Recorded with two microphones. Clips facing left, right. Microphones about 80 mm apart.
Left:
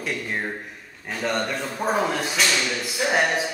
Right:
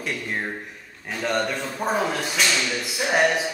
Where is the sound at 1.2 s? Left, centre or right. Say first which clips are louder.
Right 1 dB; centre.